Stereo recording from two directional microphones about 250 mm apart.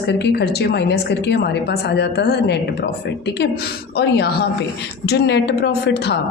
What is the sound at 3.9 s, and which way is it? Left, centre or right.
A woman's voice, left.